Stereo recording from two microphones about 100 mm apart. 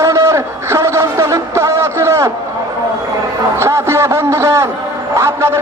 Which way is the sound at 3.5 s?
25° right (ahead or behind).